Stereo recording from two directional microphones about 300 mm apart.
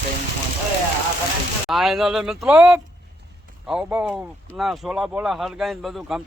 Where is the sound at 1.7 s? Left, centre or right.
Centre.